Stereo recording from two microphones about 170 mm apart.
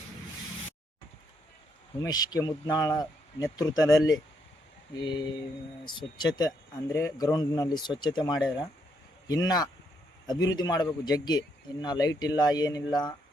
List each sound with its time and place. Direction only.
2.0 s a man's voice: 25° left (ahead or behind)